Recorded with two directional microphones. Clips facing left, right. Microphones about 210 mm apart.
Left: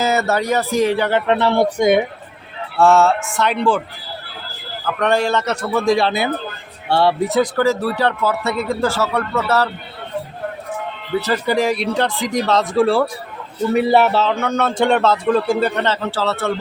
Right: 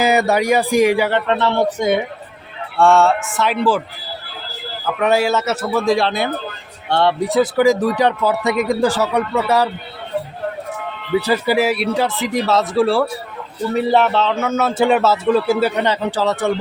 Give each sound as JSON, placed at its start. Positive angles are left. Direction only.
{"t": 0.0, "sound": "speech", "side_deg": -15}
{"t": 1.1, "sound": "speech", "side_deg": 10}
{"t": 2.7, "sound": "speech", "side_deg": 0}
{"t": 4.9, "sound": "speech", "side_deg": -5}
{"t": 7.5, "sound": "speech", "side_deg": -15}
{"t": 11.1, "sound": "speech", "side_deg": -10}